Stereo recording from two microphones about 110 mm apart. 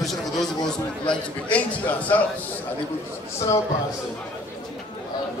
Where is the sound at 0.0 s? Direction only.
Centre (ahead or behind).